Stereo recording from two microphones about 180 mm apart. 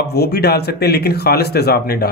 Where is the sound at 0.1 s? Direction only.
65° left (ahead or behind).